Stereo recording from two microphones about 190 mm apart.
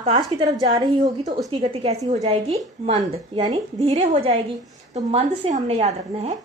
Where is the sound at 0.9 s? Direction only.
40° right (ahead or behind).